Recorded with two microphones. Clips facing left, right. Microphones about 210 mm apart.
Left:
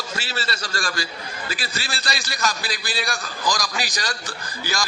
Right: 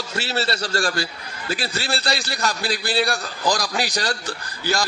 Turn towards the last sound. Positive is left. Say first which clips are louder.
# right 4 dB
turn(degrees=-60)  # may be behind; listen again after turning